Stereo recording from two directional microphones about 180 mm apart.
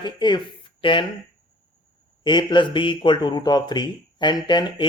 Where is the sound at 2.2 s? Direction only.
25° left (ahead or behind).